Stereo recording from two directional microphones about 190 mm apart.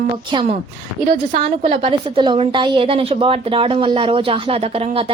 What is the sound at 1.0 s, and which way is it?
A woman's voice, 30° right (ahead or behind).